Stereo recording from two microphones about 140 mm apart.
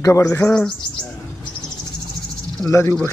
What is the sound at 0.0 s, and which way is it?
Speech, 20° left (ahead or behind).